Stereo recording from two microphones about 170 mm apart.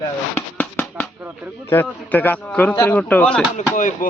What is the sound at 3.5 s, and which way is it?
Speech, 50° left (ahead or behind).